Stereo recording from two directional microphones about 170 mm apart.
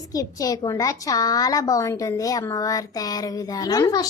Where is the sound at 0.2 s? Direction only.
20° left (ahead or behind).